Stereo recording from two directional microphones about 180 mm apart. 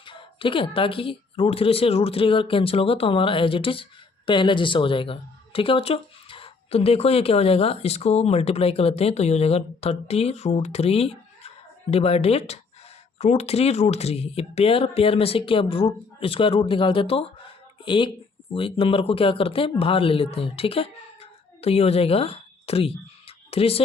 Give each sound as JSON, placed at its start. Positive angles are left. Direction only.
{"t": 0.0, "sound": "speech", "side_deg": 30}